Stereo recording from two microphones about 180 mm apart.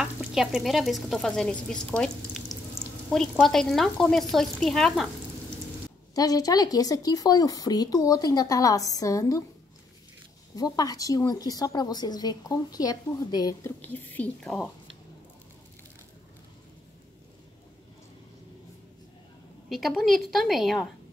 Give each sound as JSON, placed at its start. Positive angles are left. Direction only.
{"t": 0.0, "sound": "speech", "side_deg": -5}
{"t": 6.1, "sound": "speech", "side_deg": 20}
{"t": 10.5, "sound": "speech", "side_deg": 20}
{"t": 19.7, "sound": "speech", "side_deg": 0}